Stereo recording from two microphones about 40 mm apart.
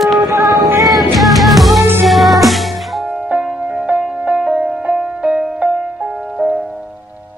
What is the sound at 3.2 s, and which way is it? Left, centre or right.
Music, right.